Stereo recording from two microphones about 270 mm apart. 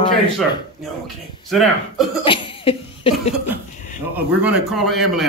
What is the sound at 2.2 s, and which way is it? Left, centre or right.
Cough, centre.